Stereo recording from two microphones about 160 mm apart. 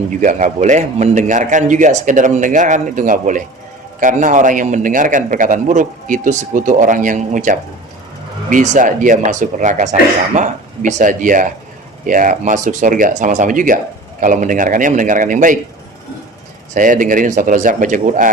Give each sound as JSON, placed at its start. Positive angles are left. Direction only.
{"t": 0.2, "sound": "a man's voice", "side_deg": -50}
{"t": 16.7, "sound": "a man's voice", "side_deg": -55}